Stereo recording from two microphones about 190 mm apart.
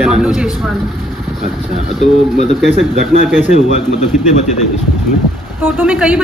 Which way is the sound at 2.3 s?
35° left (ahead or behind).